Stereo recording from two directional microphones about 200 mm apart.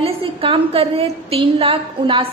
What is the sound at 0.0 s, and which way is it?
A woman's voice, 30° right (ahead or behind).